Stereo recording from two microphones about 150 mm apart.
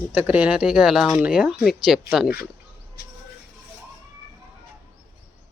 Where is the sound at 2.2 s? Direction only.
90° left.